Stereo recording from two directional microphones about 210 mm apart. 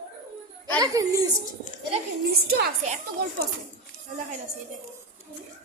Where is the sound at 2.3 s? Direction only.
50° right (ahead or behind).